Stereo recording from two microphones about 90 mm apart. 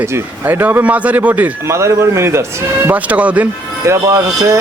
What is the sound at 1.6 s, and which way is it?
Speech, 35° right (ahead or behind).